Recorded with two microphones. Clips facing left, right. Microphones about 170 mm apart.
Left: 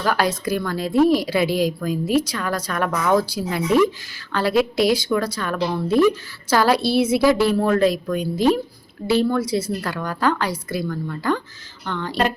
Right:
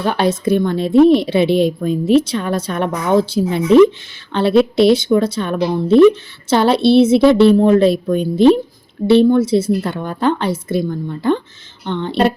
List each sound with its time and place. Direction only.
0.0 s a woman's voice: 25° right (ahead or behind)